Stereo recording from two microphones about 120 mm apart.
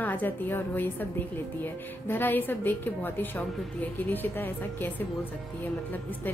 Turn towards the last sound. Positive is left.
turn(degrees=15)  # may be behind; listen again after turning